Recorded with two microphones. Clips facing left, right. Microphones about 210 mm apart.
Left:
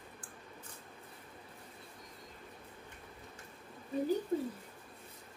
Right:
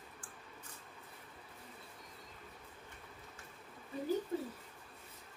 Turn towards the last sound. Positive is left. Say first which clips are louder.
# left 5 dB
turn(degrees=40)  # may be behind; listen again after turning